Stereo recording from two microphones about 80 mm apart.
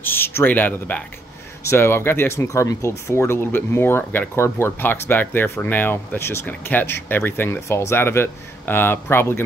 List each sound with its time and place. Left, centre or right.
0.0 s speech: left
7.6 s speech: left